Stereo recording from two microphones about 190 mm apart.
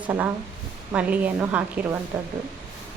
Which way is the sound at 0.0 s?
10° right (ahead or behind).